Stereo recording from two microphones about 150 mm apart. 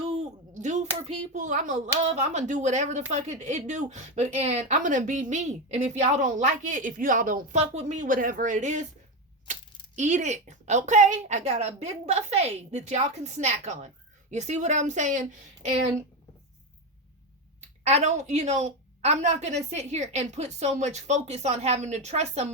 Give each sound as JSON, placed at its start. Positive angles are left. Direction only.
{"t": 0.0, "sound": "a child's voice", "side_deg": -50}
{"t": 17.6, "sound": "a child's voice", "side_deg": -45}